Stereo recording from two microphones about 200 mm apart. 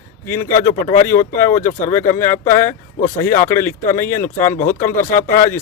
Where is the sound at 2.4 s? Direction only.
40° left (ahead or behind).